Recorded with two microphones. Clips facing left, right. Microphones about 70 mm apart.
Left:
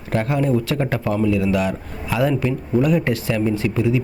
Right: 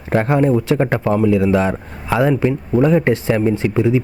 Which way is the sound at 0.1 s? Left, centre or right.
Right.